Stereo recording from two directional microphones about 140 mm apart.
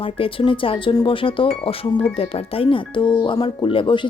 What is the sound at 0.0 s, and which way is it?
Speech, 40° left (ahead or behind).